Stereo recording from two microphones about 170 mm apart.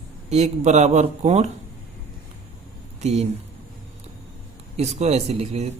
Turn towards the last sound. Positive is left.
turn(degrees=-40)  # may be behind; listen again after turning